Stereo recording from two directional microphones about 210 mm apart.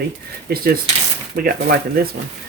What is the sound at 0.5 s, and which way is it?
Speech, 50° right (ahead or behind).